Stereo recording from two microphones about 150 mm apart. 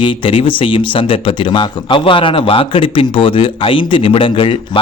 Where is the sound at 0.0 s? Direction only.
35° left (ahead or behind).